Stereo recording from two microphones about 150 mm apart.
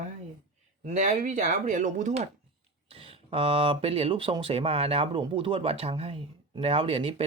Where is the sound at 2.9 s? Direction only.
40° right (ahead or behind).